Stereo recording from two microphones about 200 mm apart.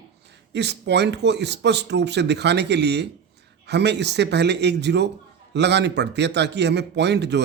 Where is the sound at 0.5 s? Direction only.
60° right (ahead or behind).